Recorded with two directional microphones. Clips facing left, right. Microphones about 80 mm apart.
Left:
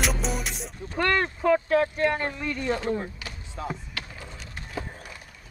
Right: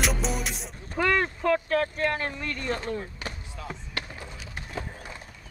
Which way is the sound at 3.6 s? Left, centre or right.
Left.